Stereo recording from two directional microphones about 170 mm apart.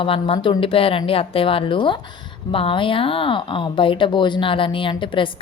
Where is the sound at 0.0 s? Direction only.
30° left (ahead or behind).